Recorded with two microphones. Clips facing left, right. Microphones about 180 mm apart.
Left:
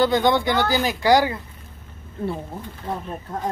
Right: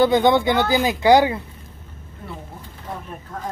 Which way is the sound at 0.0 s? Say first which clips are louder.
Right 3 dB; 20° right (ahead or behind).